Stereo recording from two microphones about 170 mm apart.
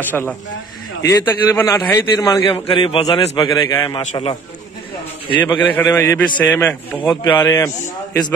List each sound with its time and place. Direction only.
0.0 s a man's voice: 10° left (ahead or behind); by 3.3 s 35° left (ahead or behind)
3.3 s a man's voice: 20° left (ahead or behind)
4.1 s a man's voice: 35° left (ahead or behind)
5.6 s a man's voice: 10° left (ahead or behind)